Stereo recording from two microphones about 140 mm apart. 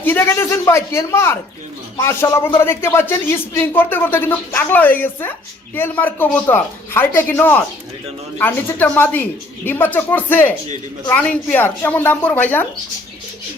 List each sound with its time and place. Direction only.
0.0 s speech: 15° left (ahead or behind)